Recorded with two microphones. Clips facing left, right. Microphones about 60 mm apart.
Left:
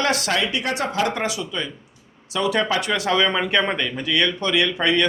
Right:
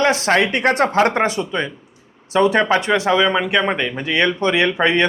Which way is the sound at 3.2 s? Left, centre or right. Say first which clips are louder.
Right 3 dB; centre.